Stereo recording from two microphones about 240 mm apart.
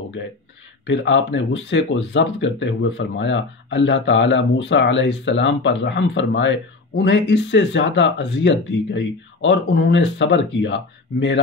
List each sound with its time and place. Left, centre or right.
0.2 s speech: left